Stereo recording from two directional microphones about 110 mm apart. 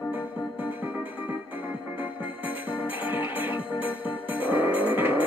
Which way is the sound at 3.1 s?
15° right (ahead or behind).